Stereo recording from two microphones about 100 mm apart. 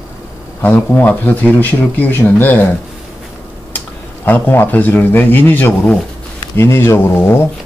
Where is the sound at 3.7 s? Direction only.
20° left (ahead or behind).